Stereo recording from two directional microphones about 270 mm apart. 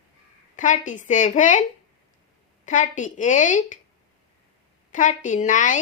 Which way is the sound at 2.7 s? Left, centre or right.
Left.